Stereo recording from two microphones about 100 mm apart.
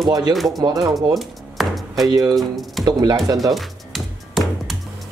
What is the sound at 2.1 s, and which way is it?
Speech, 40° right (ahead or behind).